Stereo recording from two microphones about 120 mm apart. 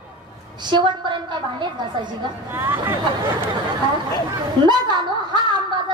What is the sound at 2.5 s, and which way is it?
Speech, 20° right (ahead or behind).